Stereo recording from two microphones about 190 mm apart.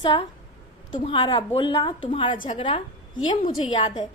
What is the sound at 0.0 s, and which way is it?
A woman's voice, 25° left (ahead or behind).